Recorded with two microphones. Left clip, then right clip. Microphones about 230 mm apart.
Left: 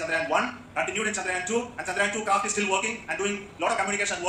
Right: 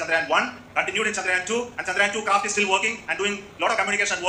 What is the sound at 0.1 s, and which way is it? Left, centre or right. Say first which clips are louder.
A man's voice: right 4 dB; centre.